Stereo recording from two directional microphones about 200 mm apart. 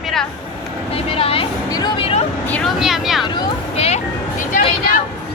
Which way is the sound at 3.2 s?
20° left (ahead or behind).